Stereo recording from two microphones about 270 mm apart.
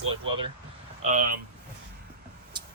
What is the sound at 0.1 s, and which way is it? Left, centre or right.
Speech, centre.